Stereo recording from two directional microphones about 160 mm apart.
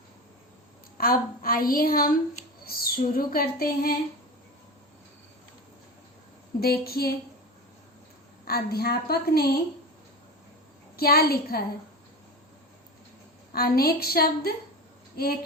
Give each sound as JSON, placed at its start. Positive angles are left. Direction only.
{"t": 0.9, "sound": "a woman's voice", "side_deg": 65}
{"t": 2.6, "sound": "a sound", "side_deg": 70}
{"t": 6.6, "sound": "a woman's voice", "side_deg": 75}
{"t": 8.4, "sound": "a woman's voice", "side_deg": 70}
{"t": 10.9, "sound": "a woman's voice", "side_deg": 75}
{"t": 13.5, "sound": "a woman's voice", "side_deg": 70}